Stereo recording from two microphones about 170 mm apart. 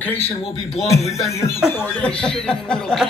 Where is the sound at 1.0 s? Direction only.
40° left (ahead or behind).